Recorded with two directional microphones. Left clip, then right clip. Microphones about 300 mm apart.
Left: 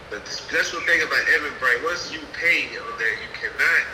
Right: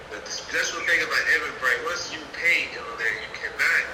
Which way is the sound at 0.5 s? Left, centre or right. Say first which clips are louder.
Left 3 dB; centre.